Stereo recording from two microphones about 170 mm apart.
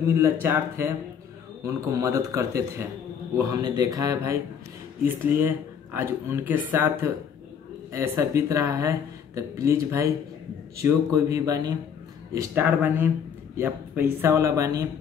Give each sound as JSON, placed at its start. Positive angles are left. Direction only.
{"t": 0.0, "sound": "a man's voice", "side_deg": -15}